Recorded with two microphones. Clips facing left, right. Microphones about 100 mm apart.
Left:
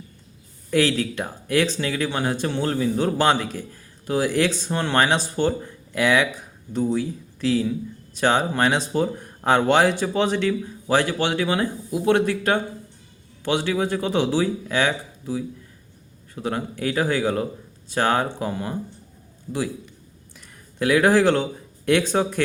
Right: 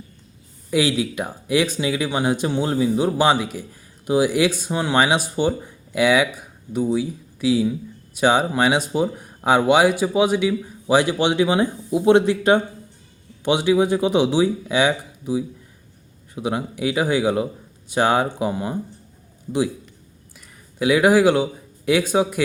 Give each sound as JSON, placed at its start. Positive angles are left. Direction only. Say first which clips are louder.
{"t": 0.7, "sound": "speech", "louder": "even", "side_deg": -10}
{"t": 20.3, "sound": "speech", "louder": "even", "side_deg": -5}